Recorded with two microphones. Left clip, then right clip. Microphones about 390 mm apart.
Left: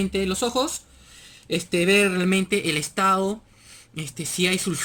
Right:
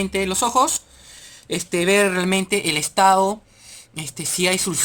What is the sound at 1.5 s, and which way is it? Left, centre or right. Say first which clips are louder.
Speech: right 1 dB; centre.